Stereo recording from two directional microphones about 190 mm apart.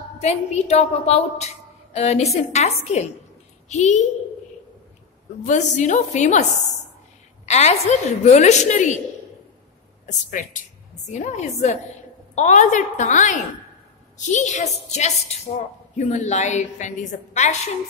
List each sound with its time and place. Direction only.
0.2 s a woman's voice: 35° left (ahead or behind)
5.4 s a woman's voice: 40° left (ahead or behind)
7.4 s a woman's voice: 35° left (ahead or behind)
10.0 s a woman's voice: 45° left (ahead or behind)